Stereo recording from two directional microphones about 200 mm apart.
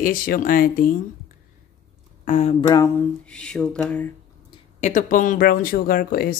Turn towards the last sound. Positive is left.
turn(degrees=50)  # may be behind; listen again after turning